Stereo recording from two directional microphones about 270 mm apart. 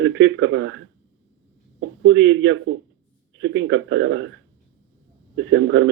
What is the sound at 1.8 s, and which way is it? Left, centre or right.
Speech, right.